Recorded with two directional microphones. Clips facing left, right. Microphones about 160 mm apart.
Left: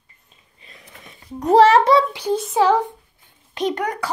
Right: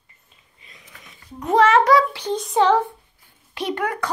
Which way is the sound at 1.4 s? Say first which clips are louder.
Left 3 dB; 35° left (ahead or behind).